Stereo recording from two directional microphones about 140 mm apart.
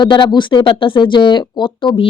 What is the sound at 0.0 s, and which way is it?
Speech, 35° left (ahead or behind).